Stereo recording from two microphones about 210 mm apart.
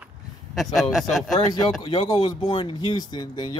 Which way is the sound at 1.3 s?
20° left (ahead or behind).